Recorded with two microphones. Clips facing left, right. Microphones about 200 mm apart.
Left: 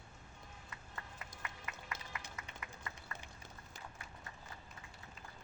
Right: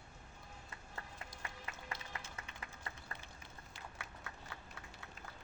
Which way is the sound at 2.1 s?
30° right (ahead or behind).